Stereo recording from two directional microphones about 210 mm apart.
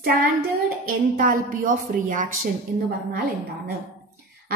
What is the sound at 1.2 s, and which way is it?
A woman's voice, 40° right (ahead or behind).